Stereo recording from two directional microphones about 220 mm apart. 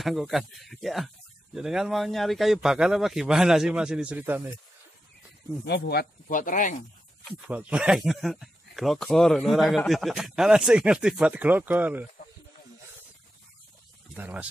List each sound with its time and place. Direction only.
0.0 s speech: centre (ahead or behind)
5.7 s speech: 45° left (ahead or behind)
7.2 s speech: 5° right (ahead or behind)
14.1 s speech: 5° right (ahead or behind)